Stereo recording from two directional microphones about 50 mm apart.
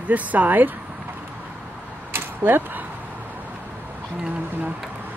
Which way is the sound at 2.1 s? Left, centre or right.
Right.